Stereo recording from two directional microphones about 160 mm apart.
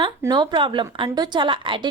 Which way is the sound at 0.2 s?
25° right (ahead or behind).